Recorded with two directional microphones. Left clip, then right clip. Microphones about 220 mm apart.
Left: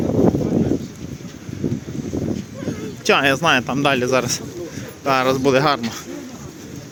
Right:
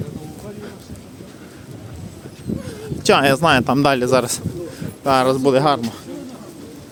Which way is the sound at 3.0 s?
20° right (ahead or behind).